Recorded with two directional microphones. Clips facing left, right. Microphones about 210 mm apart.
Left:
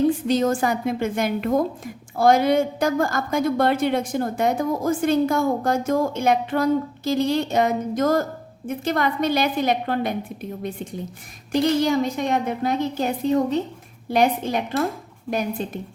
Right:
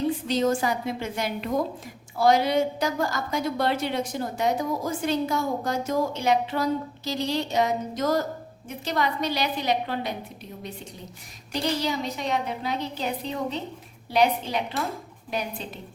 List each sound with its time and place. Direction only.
0.3 s a woman's voice: 50° left (ahead or behind)
11.5 s a woman's voice: 50° left (ahead or behind)